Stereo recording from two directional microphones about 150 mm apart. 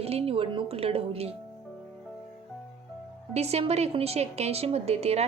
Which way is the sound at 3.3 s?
45° right (ahead or behind).